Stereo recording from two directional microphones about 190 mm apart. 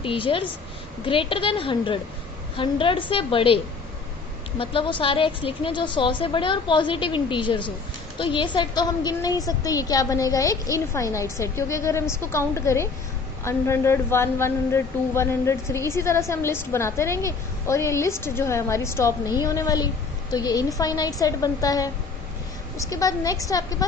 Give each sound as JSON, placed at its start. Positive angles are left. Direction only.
{"t": 0.0, "sound": "a woman's voice", "side_deg": 25}